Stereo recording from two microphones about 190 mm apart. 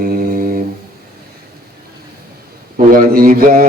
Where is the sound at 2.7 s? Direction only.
45° right (ahead or behind).